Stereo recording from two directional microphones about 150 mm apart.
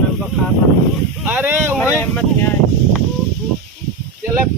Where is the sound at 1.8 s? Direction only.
20° left (ahead or behind).